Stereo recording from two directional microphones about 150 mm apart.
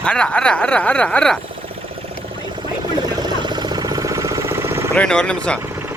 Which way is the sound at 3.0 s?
30° right (ahead or behind).